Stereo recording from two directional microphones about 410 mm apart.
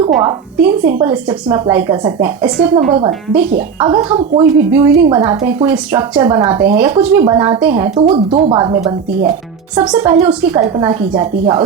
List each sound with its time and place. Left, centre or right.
0.3 s a woman's voice: centre